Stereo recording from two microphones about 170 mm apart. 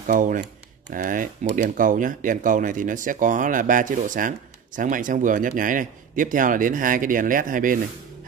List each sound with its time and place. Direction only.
0.0 s speech: 50° right (ahead or behind)